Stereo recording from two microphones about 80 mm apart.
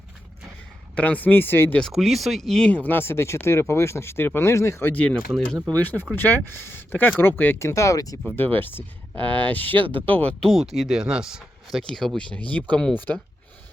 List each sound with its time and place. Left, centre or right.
0.9 s speech: centre
1.9 s speech: centre
2.7 s speech: left
4.9 s speech: centre
5.8 s speech: left
7.6 s speech: left
8.4 s speech: left
10.4 s speech: centre
11.8 s speech: centre